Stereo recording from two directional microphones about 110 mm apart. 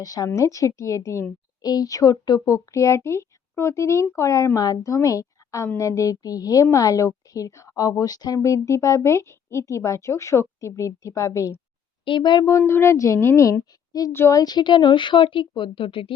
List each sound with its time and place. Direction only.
0.0 s a woman's voice: 35° left (ahead or behind)
12.0 s a woman's voice: 45° left (ahead or behind)
12.5 s a woman's voice: 25° left (ahead or behind)
14.1 s a woman's voice: 20° left (ahead or behind)
14.3 s a woman's voice: 40° left (ahead or behind)